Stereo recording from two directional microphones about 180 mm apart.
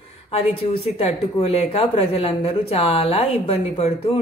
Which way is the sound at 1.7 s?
35° left (ahead or behind).